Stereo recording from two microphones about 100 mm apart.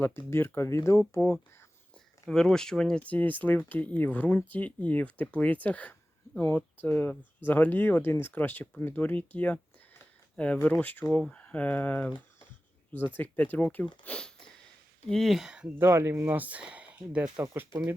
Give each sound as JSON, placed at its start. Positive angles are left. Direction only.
{"t": 0.0, "sound": "speech", "side_deg": 20}
{"t": 2.3, "sound": "speech", "side_deg": 5}
{"t": 13.1, "sound": "speech", "side_deg": 15}
{"t": 15.8, "sound": "speech", "side_deg": -25}
{"t": 17.3, "sound": "speech", "side_deg": -30}